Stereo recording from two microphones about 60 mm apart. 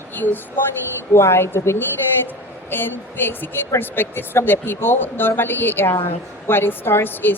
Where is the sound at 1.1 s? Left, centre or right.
Left.